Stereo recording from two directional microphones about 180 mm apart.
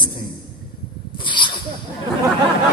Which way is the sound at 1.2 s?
25° left (ahead or behind).